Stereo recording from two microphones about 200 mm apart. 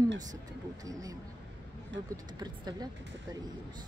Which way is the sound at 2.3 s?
20° right (ahead or behind).